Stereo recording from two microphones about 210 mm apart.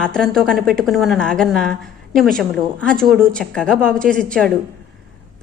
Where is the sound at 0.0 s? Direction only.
5° left (ahead or behind).